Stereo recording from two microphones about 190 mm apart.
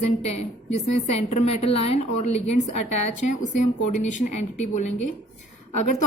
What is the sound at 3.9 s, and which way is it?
A woman's voice, 40° left (ahead or behind).